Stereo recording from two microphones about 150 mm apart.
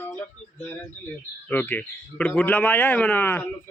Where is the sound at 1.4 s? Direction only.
10° left (ahead or behind).